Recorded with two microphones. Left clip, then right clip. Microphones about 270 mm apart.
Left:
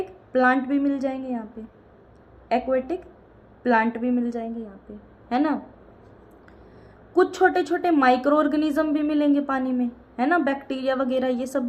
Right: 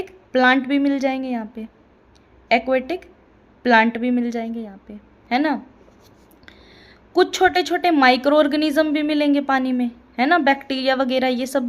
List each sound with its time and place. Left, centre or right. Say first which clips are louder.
0.3 s speech: right 4 dB; right
2.5 s speech: right 5 dB; right
7.2 s speech: right 3 dB; right